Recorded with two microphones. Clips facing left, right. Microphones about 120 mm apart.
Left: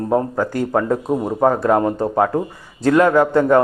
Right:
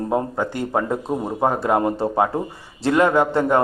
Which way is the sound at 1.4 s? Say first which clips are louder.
Left 4 dB; 10° right (ahead or behind).